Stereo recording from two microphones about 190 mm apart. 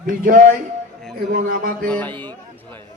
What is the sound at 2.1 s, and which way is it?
Speech, 25° right (ahead or behind).